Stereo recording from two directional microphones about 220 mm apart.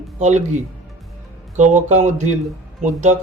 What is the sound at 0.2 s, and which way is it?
Speech, 30° right (ahead or behind).